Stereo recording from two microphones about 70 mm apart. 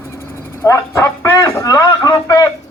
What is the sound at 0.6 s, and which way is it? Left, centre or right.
A man's voice, left.